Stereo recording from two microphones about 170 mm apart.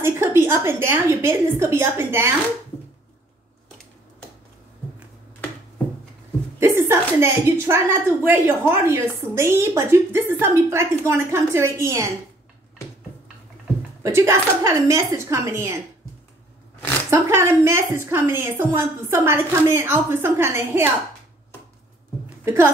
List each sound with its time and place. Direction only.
0.0 s a woman's voice: 15° right (ahead or behind)
6.6 s a woman's voice: 15° right (ahead or behind)
14.0 s a woman's voice: 15° right (ahead or behind)
17.1 s a woman's voice: 15° right (ahead or behind)
22.4 s a woman's voice: 15° right (ahead or behind)